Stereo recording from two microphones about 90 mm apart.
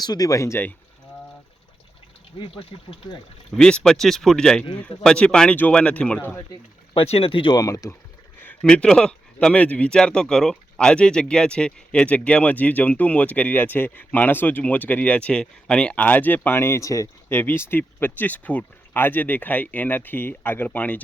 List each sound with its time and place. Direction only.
0.0 s speech: 45° left (ahead or behind)
3.5 s speech: 10° left (ahead or behind)
6.9 s speech: 85° left
7.5 s speech: 40° left (ahead or behind)
8.4 s speech: 15° left (ahead or behind); by 17.1 s 35° left (ahead or behind)
17.2 s speech: 25° left (ahead or behind)